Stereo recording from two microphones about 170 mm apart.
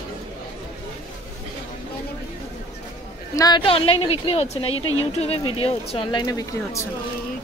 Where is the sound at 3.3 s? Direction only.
25° left (ahead or behind).